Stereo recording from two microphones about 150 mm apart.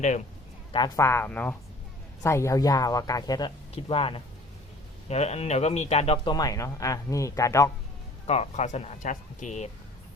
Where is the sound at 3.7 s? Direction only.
40° left (ahead or behind).